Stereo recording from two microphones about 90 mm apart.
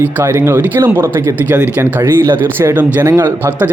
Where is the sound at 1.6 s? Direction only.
15° right (ahead or behind).